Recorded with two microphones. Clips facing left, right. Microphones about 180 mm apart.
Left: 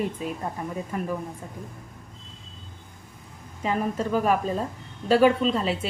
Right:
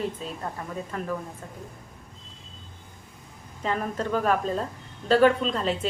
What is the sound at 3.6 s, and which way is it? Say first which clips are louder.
A woman's voice: left 2 dB; 5° left (ahead or behind).